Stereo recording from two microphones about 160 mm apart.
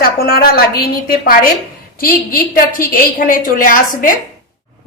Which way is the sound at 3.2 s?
60° left (ahead or behind).